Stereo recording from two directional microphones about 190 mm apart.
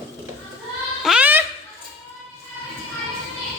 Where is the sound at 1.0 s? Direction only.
5° right (ahead or behind).